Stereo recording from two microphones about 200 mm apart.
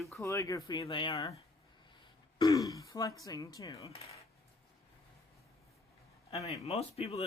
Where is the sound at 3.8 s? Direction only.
30° left (ahead or behind).